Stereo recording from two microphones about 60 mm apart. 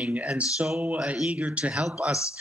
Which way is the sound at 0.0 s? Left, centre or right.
Right.